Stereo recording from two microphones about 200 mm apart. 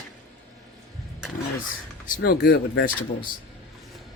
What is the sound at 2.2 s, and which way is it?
Speech, 55° left (ahead or behind).